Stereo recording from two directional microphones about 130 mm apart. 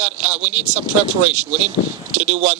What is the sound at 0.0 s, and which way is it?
Speech, 10° right (ahead or behind).